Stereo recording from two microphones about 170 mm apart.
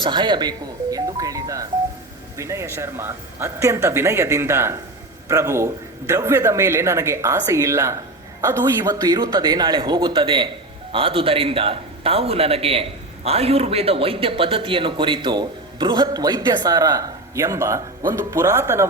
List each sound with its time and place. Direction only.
0.0 s a man's voice: 25° right (ahead or behind)